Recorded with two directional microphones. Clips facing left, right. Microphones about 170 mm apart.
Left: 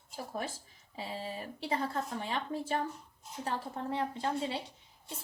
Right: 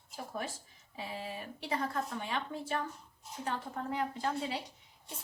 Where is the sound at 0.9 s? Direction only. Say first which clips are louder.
Left 2 dB; 35° left (ahead or behind).